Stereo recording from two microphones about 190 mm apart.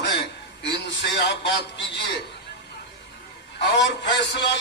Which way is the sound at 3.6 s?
65° left (ahead or behind).